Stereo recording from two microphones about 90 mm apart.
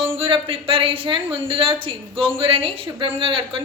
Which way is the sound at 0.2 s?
85° right.